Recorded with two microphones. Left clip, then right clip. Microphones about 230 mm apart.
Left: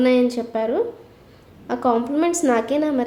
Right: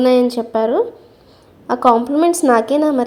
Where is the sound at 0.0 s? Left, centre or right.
Centre.